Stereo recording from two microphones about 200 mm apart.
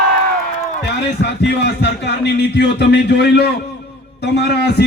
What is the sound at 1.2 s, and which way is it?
A man's voice, 55° left (ahead or behind).